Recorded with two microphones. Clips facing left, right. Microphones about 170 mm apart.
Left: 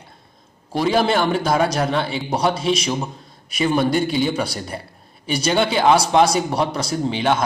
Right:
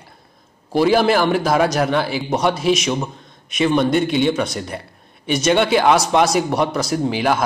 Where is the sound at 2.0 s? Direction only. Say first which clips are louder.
Right 2 dB; 30° left (ahead or behind).